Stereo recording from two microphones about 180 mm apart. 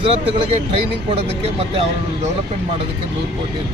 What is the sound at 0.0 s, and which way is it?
Speech, 30° right (ahead or behind).